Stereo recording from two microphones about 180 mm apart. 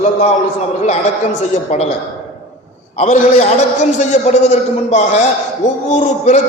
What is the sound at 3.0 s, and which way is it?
A man's voice, 40° left (ahead or behind).